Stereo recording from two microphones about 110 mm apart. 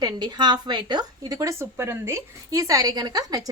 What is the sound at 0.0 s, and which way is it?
A woman's voice, 40° right (ahead or behind).